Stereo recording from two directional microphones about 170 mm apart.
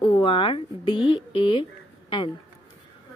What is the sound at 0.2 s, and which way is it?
Speech, 30° left (ahead or behind).